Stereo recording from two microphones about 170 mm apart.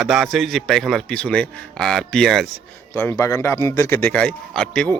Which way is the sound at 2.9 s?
15° left (ahead or behind).